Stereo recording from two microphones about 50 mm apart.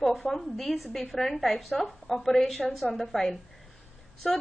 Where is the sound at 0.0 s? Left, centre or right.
Centre.